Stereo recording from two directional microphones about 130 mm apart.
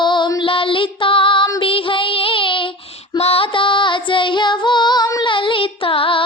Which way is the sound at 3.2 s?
45° left (ahead or behind).